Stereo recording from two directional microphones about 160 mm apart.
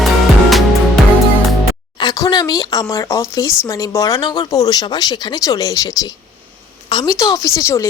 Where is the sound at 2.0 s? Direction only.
25° left (ahead or behind).